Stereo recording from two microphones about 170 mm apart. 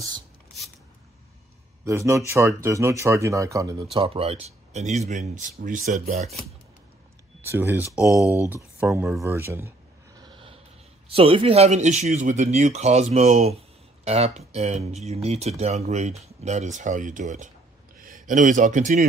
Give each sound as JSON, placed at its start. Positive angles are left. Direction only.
{"t": 1.9, "sound": "speech", "side_deg": -15}
{"t": 3.9, "sound": "speech", "side_deg": -35}
{"t": 7.4, "sound": "speech", "side_deg": -15}
{"t": 8.2, "sound": "speech", "side_deg": 20}
{"t": 8.5, "sound": "speech", "side_deg": -10}
{"t": 10.1, "sound": "a sound", "side_deg": -25}
{"t": 11.1, "sound": "speech", "side_deg": -35}